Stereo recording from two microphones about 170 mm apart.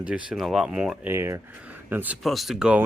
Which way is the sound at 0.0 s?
5° right (ahead or behind).